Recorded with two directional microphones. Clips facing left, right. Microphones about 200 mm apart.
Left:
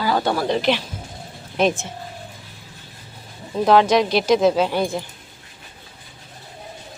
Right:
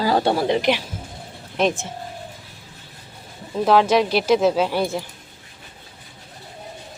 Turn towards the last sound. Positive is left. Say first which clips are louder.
# left 1 dB
turn(degrees=-5)  # may be behind; listen again after turning